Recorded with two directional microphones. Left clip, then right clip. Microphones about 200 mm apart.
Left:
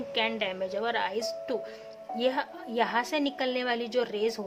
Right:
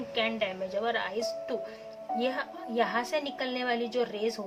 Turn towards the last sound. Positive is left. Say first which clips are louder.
# left 2 dB
turn(degrees=45)  # may be behind; listen again after turning